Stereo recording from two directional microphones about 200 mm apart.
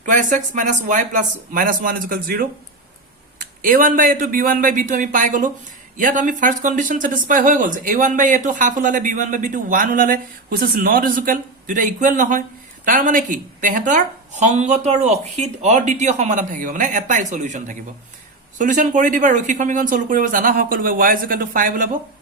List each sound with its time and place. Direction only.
0.0 s speech: 40° right (ahead or behind)
3.6 s speech: 45° right (ahead or behind)